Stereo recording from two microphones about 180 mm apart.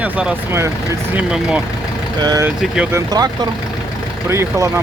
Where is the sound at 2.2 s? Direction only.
20° right (ahead or behind).